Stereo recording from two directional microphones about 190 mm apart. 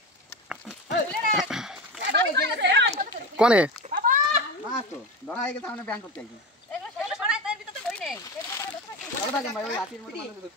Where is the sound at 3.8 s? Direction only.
45° right (ahead or behind).